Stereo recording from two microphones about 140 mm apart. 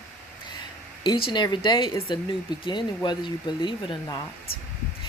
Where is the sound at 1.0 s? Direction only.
35° left (ahead or behind).